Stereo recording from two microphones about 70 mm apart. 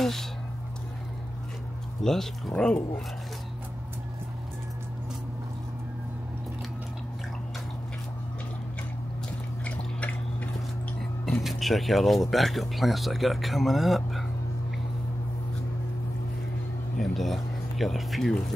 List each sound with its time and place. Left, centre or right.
0.0 s a sound: centre
2.0 s speech: centre
9.7 s drip: left
11.0 s chewing: centre
11.4 s speech: centre
17.0 s a sound: centre